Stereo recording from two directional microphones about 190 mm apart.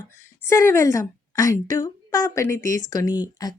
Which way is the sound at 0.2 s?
15° left (ahead or behind).